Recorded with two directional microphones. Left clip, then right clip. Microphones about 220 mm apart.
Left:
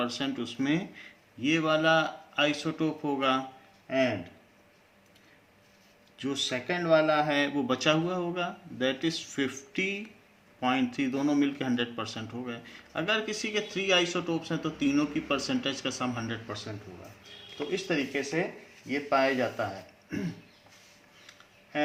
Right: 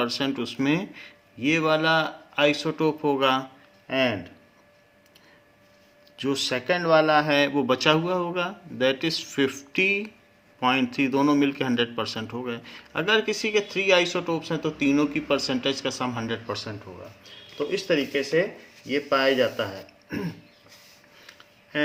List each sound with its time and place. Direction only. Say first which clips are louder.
0.0 s speech: right 6 dB; 45° right (ahead or behind)
6.1 s speech: right 5 dB; 45° right (ahead or behind)